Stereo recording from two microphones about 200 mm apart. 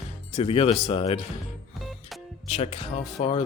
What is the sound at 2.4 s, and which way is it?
Speech, 30° left (ahead or behind).